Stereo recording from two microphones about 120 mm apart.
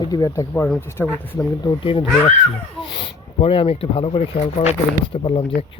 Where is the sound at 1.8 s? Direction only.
45° left (ahead or behind).